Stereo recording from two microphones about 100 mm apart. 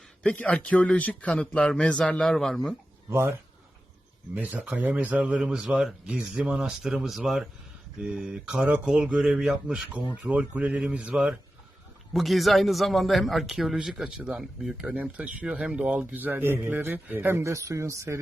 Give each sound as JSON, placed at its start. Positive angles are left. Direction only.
{"t": 0.2, "sound": "a man's voice", "side_deg": 15}
{"t": 3.1, "sound": "speech", "side_deg": -25}
{"t": 4.4, "sound": "speech", "side_deg": -15}
{"t": 12.1, "sound": "a man's voice", "side_deg": 0}